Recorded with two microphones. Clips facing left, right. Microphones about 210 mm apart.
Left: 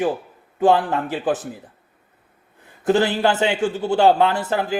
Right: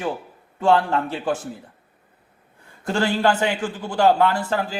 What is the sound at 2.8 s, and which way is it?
A man's voice, 20° left (ahead or behind).